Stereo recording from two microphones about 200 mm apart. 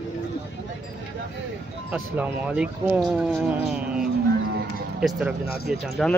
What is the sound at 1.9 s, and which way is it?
Speech, 5° right (ahead or behind).